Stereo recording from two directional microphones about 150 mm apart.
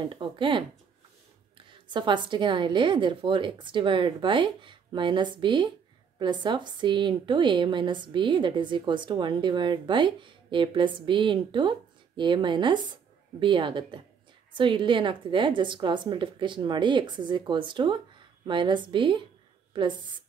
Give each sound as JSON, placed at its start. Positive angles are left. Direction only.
{"t": 0.1, "sound": "a woman's voice", "side_deg": -35}